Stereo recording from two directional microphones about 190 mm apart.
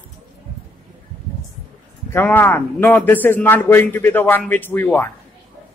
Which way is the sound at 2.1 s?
10° left (ahead or behind).